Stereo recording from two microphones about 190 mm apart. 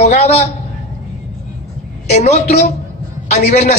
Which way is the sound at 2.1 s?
35° left (ahead or behind).